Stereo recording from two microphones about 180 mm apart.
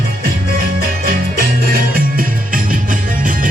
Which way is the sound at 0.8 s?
55° right (ahead or behind).